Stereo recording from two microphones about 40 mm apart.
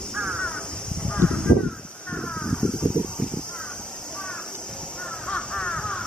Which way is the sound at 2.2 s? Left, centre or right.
Centre.